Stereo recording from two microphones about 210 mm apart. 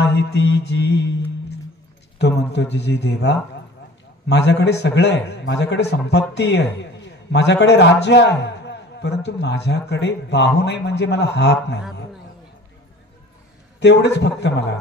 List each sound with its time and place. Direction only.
0.0 s speech: 55° left (ahead or behind)
2.1 s a man's voice: 55° left (ahead or behind)
13.7 s speech: 55° left (ahead or behind)